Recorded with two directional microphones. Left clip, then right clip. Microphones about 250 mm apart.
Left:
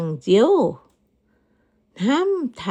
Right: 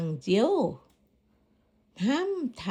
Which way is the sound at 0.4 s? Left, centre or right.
Left.